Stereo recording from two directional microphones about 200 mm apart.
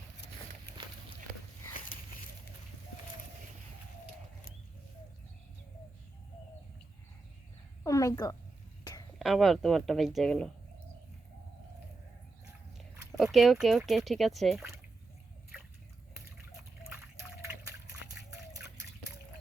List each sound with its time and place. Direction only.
7.9 s a woman's voice: 15° left (ahead or behind)
8.8 s a sound: 20° left (ahead or behind)
9.1 s speech: centre (ahead or behind)
13.1 s speech: centre (ahead or behind)